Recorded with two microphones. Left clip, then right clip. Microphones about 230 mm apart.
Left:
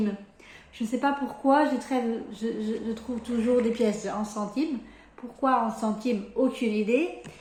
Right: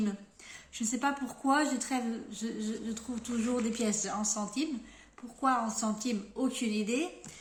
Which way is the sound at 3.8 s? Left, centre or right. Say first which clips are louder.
Left 6 dB; right.